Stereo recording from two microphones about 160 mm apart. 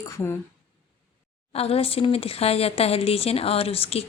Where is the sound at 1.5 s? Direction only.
40° left (ahead or behind).